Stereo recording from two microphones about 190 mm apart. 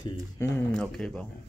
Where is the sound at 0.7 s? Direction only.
5° left (ahead or behind).